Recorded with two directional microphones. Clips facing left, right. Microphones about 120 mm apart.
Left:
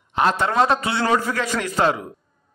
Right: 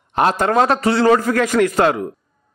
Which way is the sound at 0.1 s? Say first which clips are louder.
Right 4 dB; 45° right (ahead or behind).